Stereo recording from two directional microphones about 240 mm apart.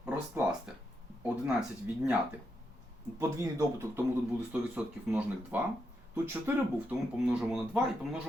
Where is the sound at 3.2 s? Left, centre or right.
Centre.